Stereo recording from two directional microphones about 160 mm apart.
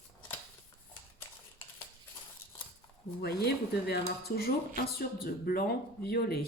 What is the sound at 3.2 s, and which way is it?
Speech, 80° left.